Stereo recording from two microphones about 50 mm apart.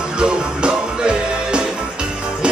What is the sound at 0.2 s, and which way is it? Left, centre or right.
Music, centre.